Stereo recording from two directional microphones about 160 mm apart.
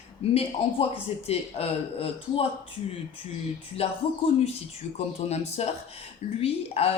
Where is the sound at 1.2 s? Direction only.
40° left (ahead or behind).